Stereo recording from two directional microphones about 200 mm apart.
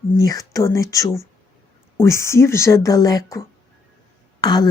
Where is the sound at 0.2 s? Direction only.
15° left (ahead or behind).